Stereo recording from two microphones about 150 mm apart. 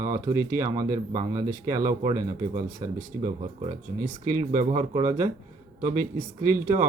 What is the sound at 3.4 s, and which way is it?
Speech, 45° right (ahead or behind).